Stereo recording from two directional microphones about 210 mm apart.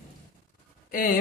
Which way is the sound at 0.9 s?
40° left (ahead or behind).